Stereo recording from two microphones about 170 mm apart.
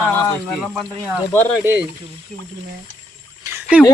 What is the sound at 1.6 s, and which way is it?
Speech, 15° right (ahead or behind).